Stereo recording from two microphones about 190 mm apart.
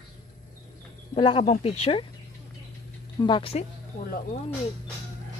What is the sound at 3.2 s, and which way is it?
Speech, 25° left (ahead or behind).